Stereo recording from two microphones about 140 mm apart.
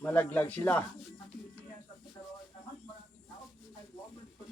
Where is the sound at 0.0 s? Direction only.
10° left (ahead or behind).